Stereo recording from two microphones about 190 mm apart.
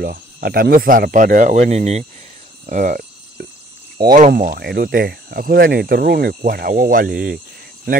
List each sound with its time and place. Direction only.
0.0 s speech: 50° right (ahead or behind); by 2.0 s 35° right (ahead or behind)
2.6 s cricket: 40° right (ahead or behind)
4.0 s speech: 50° right (ahead or behind)